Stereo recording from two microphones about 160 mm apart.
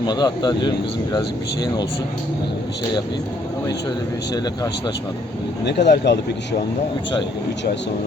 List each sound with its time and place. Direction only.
0.0 s speech: 25° left (ahead or behind)
5.6 s speech: 90° left